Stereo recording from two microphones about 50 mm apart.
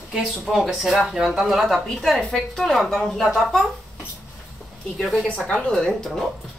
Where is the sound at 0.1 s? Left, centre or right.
Centre.